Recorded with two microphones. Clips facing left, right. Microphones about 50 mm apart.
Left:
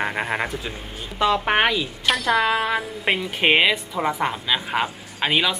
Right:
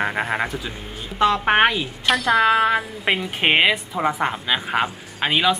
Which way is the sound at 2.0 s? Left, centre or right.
Centre.